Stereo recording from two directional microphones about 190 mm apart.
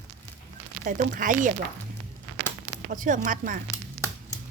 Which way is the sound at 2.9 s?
45° right (ahead or behind).